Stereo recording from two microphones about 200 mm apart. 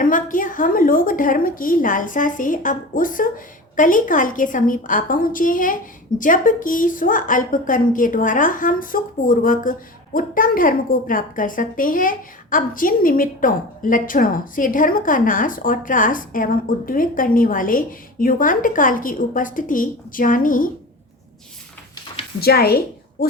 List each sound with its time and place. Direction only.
0.0 s a woman's voice: 40° left (ahead or behind)
22.4 s a woman's voice: 50° left (ahead or behind)